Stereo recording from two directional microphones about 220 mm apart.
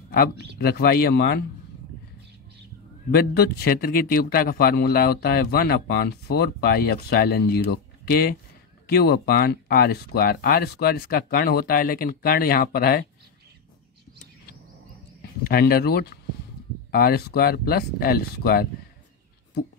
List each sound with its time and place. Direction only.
0.6 s speech: 45° left (ahead or behind)
3.1 s speech: 45° left (ahead or behind)
15.4 s speech: 45° left (ahead or behind)